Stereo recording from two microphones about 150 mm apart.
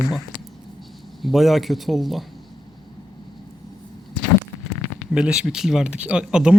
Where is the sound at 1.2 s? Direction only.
Centre (ahead or behind).